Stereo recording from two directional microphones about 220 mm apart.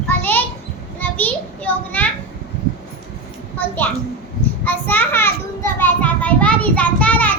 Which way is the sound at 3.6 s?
10° left (ahead or behind).